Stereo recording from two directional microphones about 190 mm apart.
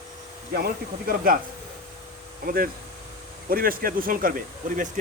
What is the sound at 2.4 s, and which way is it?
Speech, 50° right (ahead or behind).